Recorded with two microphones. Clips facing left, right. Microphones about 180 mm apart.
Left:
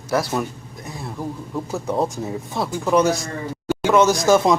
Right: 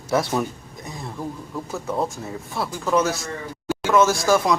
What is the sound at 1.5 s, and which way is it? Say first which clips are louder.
A man's voice: left 4 dB; 15° left (ahead or behind).